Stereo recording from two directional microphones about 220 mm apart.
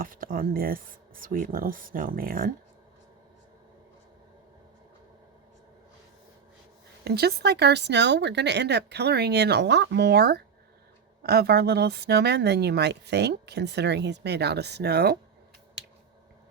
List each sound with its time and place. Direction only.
0.0 s speech: 40° right (ahead or behind)
7.0 s speech: 45° right (ahead or behind)